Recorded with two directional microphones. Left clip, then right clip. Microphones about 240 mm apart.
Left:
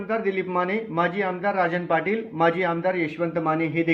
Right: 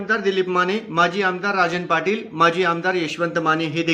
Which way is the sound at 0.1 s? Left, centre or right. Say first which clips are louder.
Right 5 dB; centre.